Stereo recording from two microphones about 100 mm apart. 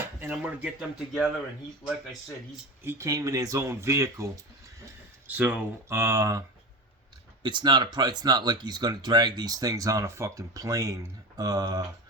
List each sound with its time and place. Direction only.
0.2 s a man's voice: 10° right (ahead or behind)
2.8 s speech: 30° right (ahead or behind)
5.3 s a man's voice: 15° right (ahead or behind)
5.9 s speech: 30° right (ahead or behind)
7.4 s speech: 50° right (ahead or behind)